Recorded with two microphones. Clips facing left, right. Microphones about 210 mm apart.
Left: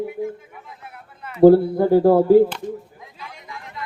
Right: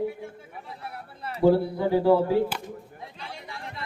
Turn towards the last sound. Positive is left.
turn(degrees=-30)  # may be behind; listen again after turning